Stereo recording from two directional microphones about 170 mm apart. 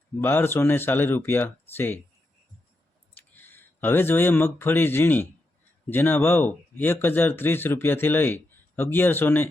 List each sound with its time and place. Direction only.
0.2 s speech: 15° left (ahead or behind)
3.2 s speech: 10° left (ahead or behind)